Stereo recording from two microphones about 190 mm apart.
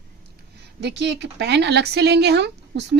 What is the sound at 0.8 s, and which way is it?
Speech, 65° right (ahead or behind).